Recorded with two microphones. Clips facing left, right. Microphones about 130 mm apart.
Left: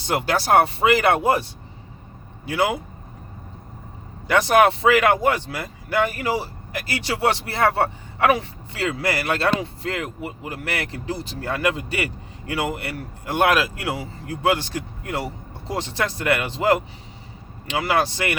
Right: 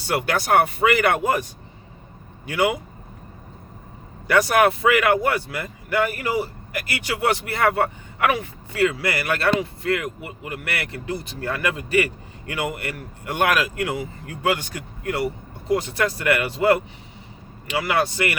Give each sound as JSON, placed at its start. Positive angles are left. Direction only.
{"t": 0.3, "sound": "speech", "side_deg": 30}
{"t": 4.3, "sound": "speech", "side_deg": 25}
{"t": 17.7, "sound": "speech", "side_deg": 30}